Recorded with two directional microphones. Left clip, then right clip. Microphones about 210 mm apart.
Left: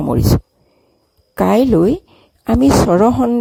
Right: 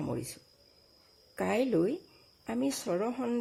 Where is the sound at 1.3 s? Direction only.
40° left (ahead or behind).